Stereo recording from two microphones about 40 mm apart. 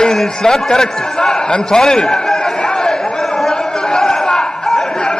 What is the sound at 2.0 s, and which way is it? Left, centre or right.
Chatter, centre.